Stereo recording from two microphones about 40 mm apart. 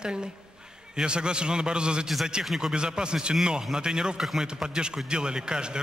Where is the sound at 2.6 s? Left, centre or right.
Centre.